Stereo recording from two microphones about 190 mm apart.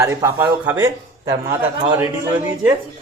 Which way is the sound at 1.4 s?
20° right (ahead or behind).